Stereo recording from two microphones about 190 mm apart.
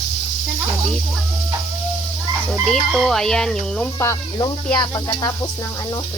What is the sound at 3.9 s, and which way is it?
Sizzle, 20° left (ahead or behind).